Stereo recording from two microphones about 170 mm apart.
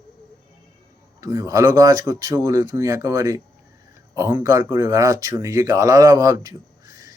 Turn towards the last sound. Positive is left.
turn(degrees=-20)  # may be behind; listen again after turning